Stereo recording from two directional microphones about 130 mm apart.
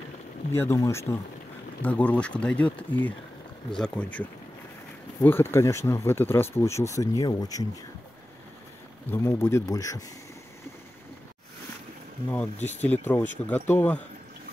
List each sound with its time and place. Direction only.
0.5 s speech: 20° left (ahead or behind)
9.0 s speech: 20° left (ahead or behind)
12.6 s speech: 15° left (ahead or behind)